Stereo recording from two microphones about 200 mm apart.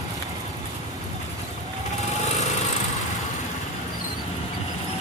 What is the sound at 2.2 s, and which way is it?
Lawn mower, 35° left (ahead or behind).